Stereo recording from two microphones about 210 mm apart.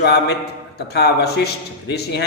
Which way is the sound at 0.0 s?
50° left (ahead or behind).